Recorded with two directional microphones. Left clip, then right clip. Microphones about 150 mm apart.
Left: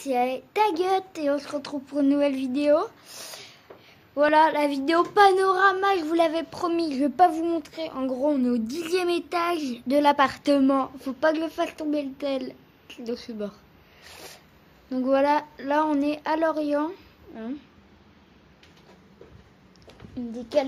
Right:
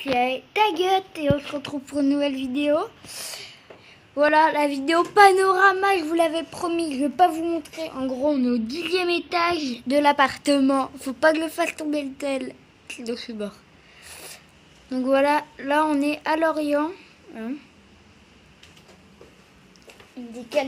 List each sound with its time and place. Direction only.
0.1 s a child's voice: 10° left (ahead or behind)
14.9 s speech: 5° left (ahead or behind)